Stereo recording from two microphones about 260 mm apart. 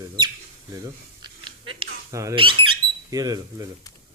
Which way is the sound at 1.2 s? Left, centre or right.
Centre.